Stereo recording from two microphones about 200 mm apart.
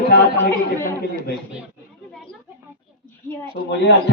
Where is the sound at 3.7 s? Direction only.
60° left (ahead or behind).